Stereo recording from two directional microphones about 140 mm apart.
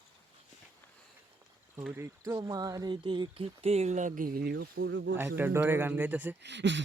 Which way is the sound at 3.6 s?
50° right (ahead or behind).